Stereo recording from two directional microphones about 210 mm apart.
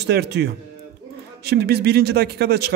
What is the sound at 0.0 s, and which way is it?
A man's voice, 50° right (ahead or behind).